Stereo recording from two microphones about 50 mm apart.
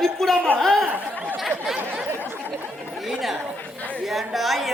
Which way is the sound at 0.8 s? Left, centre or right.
Right.